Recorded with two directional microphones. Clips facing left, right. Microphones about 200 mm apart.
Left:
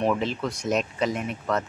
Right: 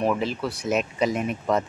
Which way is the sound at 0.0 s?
5° right (ahead or behind).